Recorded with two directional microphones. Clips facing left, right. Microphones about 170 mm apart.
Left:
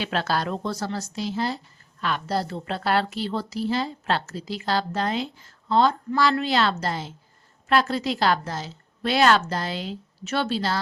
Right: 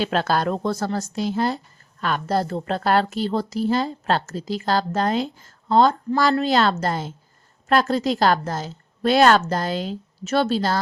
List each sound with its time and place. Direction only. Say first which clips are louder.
0.0 s a woman's voice: right 4 dB; 45° right (ahead or behind)